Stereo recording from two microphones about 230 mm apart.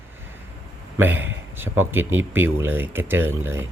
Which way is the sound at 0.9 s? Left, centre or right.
Centre.